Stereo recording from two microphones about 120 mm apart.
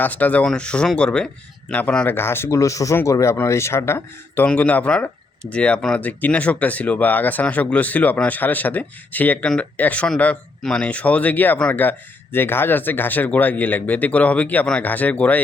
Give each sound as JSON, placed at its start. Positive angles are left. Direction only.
{"t": 0.0, "sound": "speech", "side_deg": 15}